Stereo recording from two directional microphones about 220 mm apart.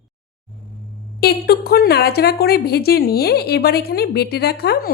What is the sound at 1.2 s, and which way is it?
Speech, 45° left (ahead or behind).